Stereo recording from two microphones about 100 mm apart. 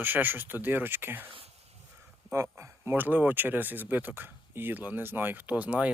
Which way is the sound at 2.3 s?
25° right (ahead or behind).